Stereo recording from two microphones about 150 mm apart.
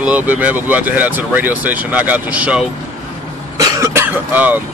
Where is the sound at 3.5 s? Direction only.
25° right (ahead or behind).